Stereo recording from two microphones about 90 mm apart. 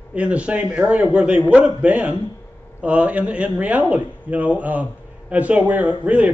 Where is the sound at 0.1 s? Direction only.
15° right (ahead or behind).